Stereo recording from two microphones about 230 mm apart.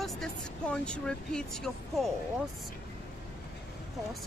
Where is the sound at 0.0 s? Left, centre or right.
Centre.